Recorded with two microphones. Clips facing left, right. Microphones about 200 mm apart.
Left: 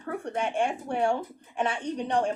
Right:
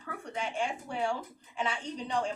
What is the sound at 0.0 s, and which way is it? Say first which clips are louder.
Speech: left 7 dB; 55° left (ahead or behind).